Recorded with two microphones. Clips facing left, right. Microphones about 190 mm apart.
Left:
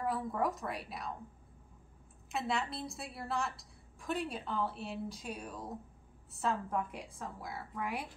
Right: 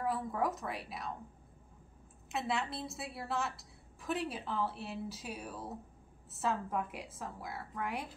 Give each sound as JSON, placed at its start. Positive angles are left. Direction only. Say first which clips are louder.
{"t": 0.0, "sound": "a woman's voice", "louder": "even", "side_deg": 0}
{"t": 2.3, "sound": "a woman's voice", "louder": "even", "side_deg": 0}